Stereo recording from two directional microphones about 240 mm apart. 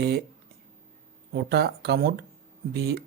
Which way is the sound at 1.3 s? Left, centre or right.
Right.